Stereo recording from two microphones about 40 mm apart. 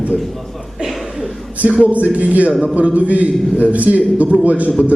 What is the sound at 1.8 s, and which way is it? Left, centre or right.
A man's voice, right.